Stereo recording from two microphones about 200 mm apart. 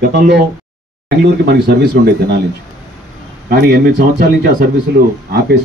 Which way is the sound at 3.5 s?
50° right (ahead or behind).